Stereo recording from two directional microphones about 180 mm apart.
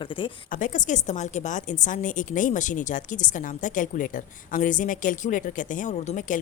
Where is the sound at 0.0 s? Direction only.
30° left (ahead or behind).